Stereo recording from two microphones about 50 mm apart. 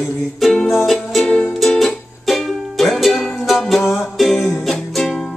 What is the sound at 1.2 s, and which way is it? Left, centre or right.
Music, centre.